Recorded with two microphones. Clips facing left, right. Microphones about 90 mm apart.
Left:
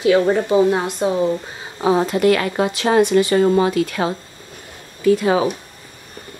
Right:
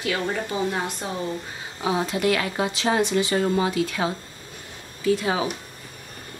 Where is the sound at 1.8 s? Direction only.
45° left (ahead or behind).